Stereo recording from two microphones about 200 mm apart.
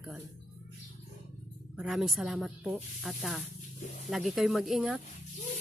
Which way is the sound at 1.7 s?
5° right (ahead or behind).